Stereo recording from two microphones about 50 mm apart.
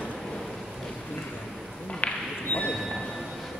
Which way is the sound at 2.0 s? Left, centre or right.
Left.